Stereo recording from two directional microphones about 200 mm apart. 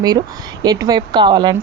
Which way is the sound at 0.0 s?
20° right (ahead or behind).